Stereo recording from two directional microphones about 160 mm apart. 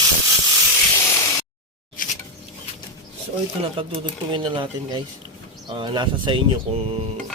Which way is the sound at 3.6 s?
35° right (ahead or behind).